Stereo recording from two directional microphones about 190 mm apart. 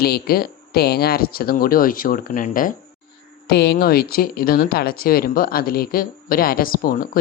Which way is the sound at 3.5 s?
55° left (ahead or behind).